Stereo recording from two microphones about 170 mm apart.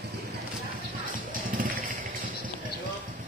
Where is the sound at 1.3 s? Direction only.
50° right (ahead or behind).